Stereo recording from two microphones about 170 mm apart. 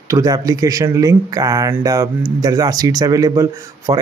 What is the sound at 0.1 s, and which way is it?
Speech, 20° right (ahead or behind).